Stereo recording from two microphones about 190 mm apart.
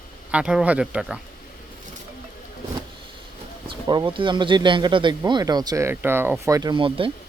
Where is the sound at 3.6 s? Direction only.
25° right (ahead or behind).